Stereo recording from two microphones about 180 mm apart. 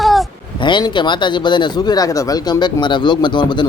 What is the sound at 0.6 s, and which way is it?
Speech, 25° left (ahead or behind).